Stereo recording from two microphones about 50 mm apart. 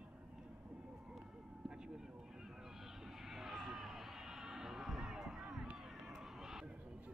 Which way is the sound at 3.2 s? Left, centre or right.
Centre.